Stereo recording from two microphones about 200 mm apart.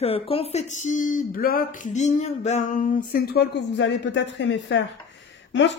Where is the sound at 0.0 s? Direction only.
30° left (ahead or behind).